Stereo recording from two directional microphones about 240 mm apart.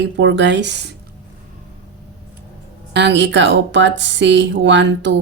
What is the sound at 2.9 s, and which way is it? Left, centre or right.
Speech, right.